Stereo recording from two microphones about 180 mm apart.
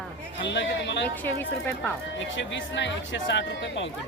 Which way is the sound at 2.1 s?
90° left.